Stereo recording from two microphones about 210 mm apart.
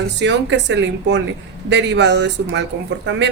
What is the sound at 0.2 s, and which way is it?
A woman's voice, 55° right (ahead or behind).